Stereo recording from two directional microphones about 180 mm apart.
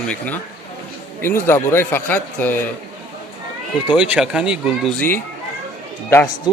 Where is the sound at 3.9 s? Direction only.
5° right (ahead or behind).